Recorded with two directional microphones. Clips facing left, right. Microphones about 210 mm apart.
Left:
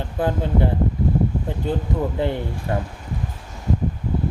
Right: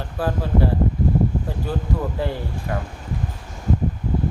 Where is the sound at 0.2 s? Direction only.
20° left (ahead or behind).